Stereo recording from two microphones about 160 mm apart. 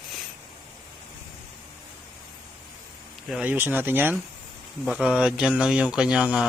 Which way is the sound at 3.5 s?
15° right (ahead or behind).